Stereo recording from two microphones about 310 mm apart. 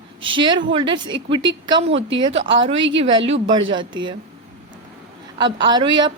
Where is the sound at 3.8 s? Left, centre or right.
Right.